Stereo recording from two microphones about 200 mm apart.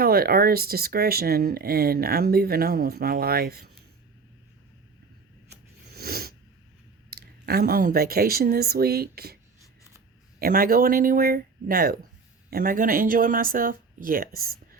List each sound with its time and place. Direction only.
0.0 s speech: 50° right (ahead or behind)
6.0 s a sound: 50° right (ahead or behind)
7.1 s speech: 50° right (ahead or behind)
10.4 s speech: 45° right (ahead or behind)